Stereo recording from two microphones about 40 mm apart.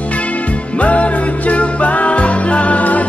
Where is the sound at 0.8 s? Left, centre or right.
Left.